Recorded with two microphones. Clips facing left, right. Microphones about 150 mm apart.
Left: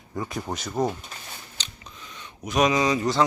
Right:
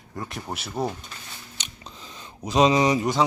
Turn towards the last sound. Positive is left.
turn(degrees=-20)  # may be behind; listen again after turning